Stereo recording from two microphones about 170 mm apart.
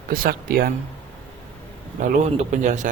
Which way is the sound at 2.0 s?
45° right (ahead or behind).